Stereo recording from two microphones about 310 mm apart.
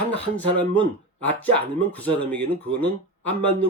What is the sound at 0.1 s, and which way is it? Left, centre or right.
Speech, centre.